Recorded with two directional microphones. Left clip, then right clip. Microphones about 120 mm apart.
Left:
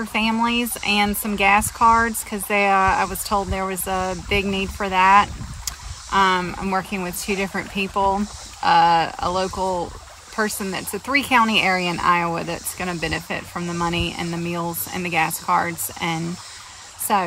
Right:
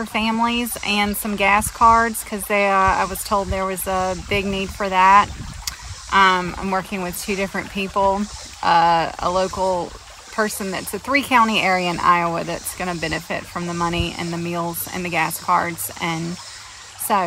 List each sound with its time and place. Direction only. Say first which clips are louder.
0.1 s speech: even; 20° left (ahead or behind)